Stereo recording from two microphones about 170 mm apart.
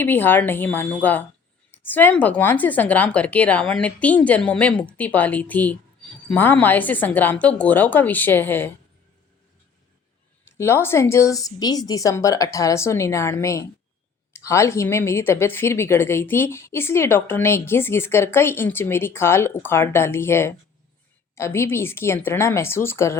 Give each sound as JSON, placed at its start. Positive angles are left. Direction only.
{"t": 0.0, "sound": "speech", "side_deg": 10}
{"t": 10.6, "sound": "speech", "side_deg": 15}